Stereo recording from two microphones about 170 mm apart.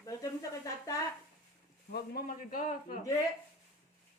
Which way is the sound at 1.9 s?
65° left (ahead or behind).